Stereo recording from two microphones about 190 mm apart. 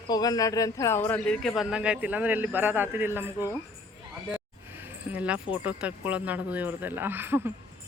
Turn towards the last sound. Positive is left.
turn(degrees=-10)  # may be behind; listen again after turning